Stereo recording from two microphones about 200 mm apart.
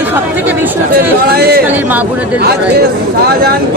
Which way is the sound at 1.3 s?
50° right (ahead or behind).